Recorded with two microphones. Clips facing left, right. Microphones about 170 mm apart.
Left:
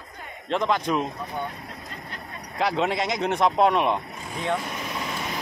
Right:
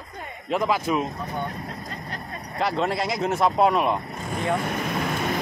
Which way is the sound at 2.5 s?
Centre (ahead or behind).